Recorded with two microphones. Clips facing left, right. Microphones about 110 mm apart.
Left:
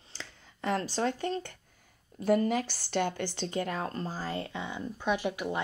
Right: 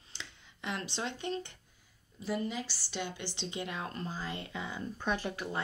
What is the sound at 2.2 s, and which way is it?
A woman's voice, 55° left (ahead or behind).